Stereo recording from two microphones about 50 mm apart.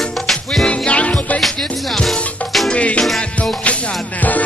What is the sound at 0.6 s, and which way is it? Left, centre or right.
Music, left.